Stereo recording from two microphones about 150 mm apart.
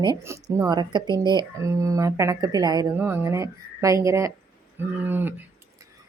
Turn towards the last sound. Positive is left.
turn(degrees=-15)  # may be behind; listen again after turning